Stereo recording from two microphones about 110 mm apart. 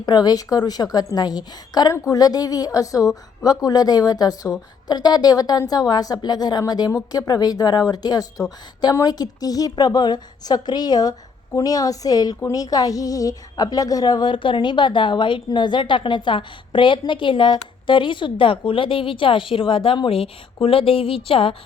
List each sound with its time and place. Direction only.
0.0 s a woman's voice: 40° left (ahead or behind); by 21.5 s 55° left (ahead or behind)